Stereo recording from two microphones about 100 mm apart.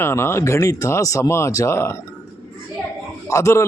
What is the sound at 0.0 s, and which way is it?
A man's voice, 25° left (ahead or behind).